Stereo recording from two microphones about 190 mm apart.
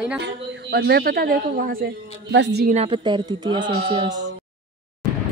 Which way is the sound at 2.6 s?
30° right (ahead or behind).